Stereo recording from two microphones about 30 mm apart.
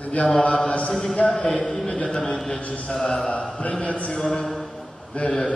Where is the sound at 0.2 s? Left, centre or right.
Left.